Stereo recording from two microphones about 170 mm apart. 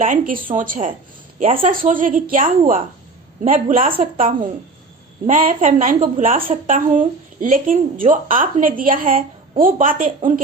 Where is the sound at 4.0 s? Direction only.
50° right (ahead or behind).